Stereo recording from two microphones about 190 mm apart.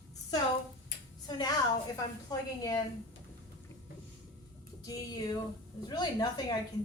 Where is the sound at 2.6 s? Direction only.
20° left (ahead or behind).